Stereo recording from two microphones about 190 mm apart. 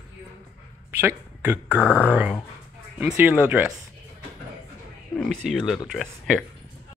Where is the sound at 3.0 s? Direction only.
10° right (ahead or behind).